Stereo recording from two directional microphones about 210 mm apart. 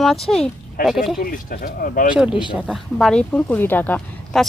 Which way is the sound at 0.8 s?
45° left (ahead or behind).